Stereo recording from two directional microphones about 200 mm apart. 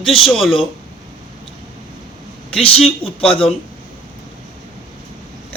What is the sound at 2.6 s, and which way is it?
Speech, 30° left (ahead or behind).